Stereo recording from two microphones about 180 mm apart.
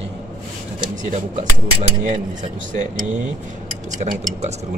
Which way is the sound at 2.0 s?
45° right (ahead or behind).